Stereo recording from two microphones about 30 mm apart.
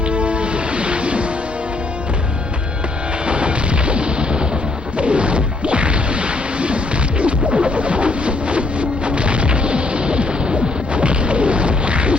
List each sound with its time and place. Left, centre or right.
0.1 s music: right
3.2 s music: right
4.9 s whack: right